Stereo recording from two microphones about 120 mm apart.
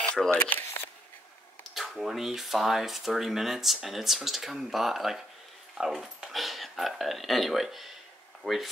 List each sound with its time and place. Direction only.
0.0 s a sound: 5° left (ahead or behind)
0.3 s speech: 15° left (ahead or behind)
1.7 s speech: centre (ahead or behind)
8.4 s speech: 10° left (ahead or behind)